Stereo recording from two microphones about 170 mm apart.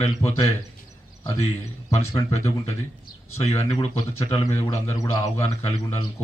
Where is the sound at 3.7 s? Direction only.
20° left (ahead or behind).